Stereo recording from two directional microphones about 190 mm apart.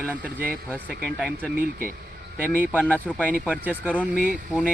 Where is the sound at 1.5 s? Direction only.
50° right (ahead or behind).